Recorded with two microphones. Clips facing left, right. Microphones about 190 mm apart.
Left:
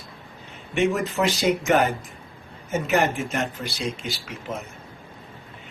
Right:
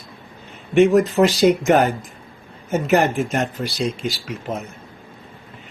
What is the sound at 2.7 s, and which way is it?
Speech, 40° right (ahead or behind).